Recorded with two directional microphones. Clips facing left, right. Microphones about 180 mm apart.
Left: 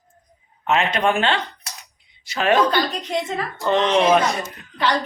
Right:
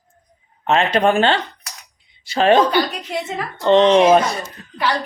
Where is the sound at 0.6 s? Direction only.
35° right (ahead or behind).